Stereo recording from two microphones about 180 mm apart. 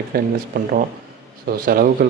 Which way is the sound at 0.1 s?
60° right (ahead or behind).